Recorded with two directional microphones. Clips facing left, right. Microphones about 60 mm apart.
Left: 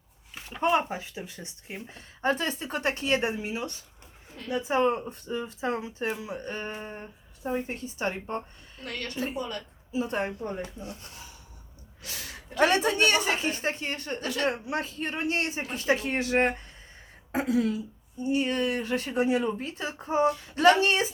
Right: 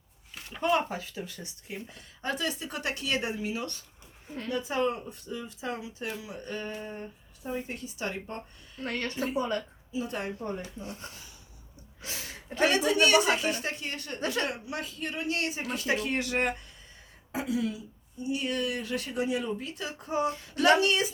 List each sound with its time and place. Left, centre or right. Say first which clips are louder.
0.6 s speech: left 2 dB; left
4.8 s speech: left 5 dB; left
8.8 s a woman's voice: right 1 dB; right
9.9 s speech: left 4 dB; left
12.5 s speech: left 1 dB; left
14.2 s a woman's voice: right 5 dB; right
14.4 s speech: left 5 dB; left
17.3 s speech: left 5 dB; left
18.2 s speech: left 4 dB; left